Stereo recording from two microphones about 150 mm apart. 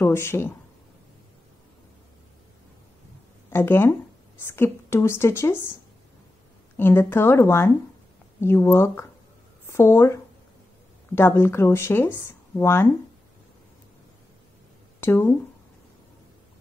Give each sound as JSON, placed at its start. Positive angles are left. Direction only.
{"t": 0.0, "sound": "speech", "side_deg": 15}
{"t": 3.4, "sound": "speech", "side_deg": 15}
{"t": 6.8, "sound": "speech", "side_deg": 15}
{"t": 15.0, "sound": "speech", "side_deg": 15}